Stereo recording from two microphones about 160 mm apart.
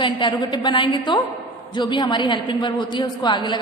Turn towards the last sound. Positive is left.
turn(degrees=30)  # may be behind; listen again after turning